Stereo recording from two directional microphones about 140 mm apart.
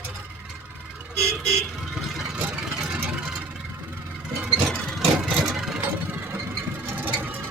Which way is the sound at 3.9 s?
10° right (ahead or behind).